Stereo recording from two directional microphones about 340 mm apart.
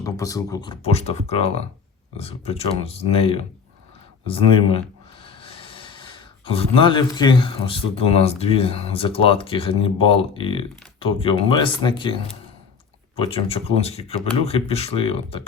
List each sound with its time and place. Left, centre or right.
0.0 s speech: centre